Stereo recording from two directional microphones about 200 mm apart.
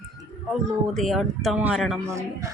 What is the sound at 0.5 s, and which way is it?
Speech, centre (ahead or behind).